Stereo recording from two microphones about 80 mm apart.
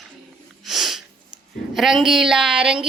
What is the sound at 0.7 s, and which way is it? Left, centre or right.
Sniff, centre.